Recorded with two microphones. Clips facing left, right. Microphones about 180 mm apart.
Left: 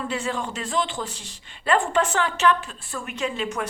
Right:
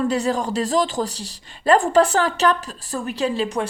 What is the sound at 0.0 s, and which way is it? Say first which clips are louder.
Speech: right 7 dB; 40° right (ahead or behind).